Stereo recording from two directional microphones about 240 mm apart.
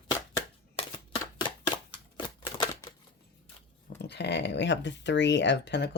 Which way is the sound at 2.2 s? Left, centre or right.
Centre.